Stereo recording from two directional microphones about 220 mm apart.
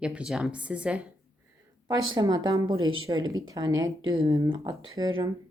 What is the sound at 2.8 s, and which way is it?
Speech, 65° right (ahead or behind).